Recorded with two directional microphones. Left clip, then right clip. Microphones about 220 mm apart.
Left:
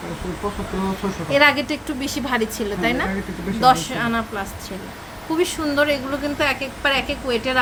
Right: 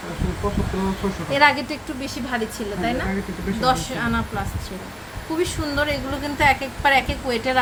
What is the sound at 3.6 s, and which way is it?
Speech, 20° left (ahead or behind).